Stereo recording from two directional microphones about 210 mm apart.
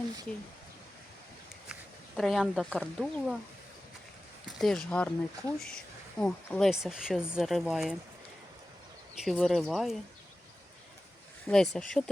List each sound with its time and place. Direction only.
1.6 s speech: centre (ahead or behind)
4.6 s speech: 5° left (ahead or behind)
9.1 s speech: centre (ahead or behind)
11.4 s speech: centre (ahead or behind)